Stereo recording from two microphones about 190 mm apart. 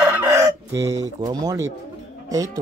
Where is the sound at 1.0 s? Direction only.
20° right (ahead or behind).